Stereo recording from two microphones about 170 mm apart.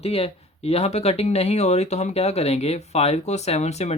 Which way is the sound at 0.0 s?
35° left (ahead or behind).